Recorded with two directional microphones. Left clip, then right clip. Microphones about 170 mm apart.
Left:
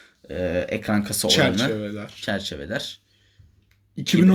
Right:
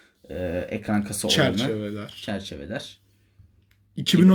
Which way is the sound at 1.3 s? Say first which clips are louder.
Left 2 dB; 15° right (ahead or behind).